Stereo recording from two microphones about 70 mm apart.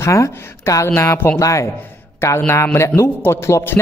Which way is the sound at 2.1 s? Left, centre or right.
Left.